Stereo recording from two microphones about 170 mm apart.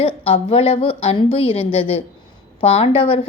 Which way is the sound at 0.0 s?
30° left (ahead or behind).